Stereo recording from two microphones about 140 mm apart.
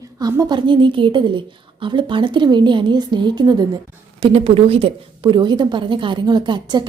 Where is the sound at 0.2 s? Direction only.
25° right (ahead or behind).